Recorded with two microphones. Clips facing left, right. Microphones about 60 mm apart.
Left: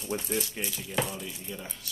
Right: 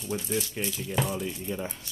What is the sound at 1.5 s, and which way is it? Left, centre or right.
Speech, centre.